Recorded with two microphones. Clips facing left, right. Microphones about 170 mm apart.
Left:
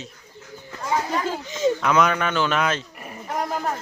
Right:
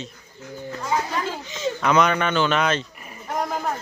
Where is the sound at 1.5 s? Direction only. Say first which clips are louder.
Left 8 dB; 45° left (ahead or behind).